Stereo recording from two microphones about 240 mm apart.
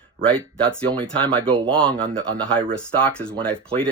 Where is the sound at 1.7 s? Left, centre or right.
Centre.